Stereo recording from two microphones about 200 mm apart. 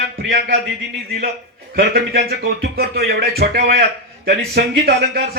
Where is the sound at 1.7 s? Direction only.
50° right (ahead or behind).